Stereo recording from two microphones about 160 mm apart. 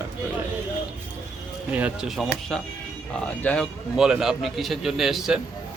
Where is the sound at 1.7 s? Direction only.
10° right (ahead or behind).